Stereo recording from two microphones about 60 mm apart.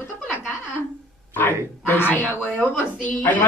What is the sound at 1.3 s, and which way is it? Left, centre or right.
Speech, left.